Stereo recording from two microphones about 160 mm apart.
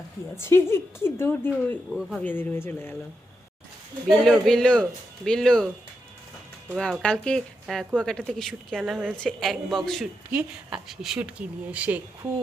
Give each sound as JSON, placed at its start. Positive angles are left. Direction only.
{"t": 0.3, "sound": "speech", "side_deg": 15}
{"t": 2.0, "sound": "a woman's voice", "side_deg": -5}
{"t": 2.2, "sound": "speech", "side_deg": 15}
{"t": 4.2, "sound": "a woman's voice", "side_deg": 0}
{"t": 6.7, "sound": "a woman's voice", "side_deg": 5}